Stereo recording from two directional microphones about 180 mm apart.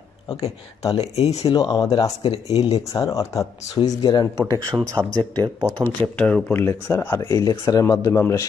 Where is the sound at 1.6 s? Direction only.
20° left (ahead or behind).